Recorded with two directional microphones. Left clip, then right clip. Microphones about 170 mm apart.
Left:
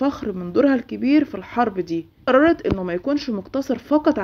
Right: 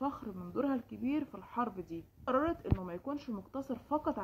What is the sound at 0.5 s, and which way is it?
Speech, 10° left (ahead or behind).